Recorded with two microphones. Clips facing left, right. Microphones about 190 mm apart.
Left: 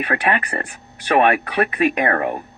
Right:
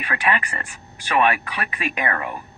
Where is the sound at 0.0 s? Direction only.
55° left (ahead or behind).